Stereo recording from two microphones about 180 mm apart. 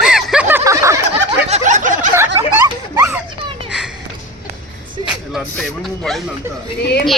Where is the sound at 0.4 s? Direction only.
15° right (ahead or behind).